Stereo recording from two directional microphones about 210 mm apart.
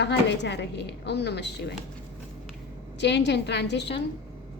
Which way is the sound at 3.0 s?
55° left (ahead or behind).